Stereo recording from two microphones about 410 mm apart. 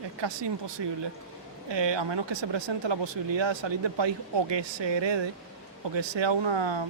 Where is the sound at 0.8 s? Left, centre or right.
Right.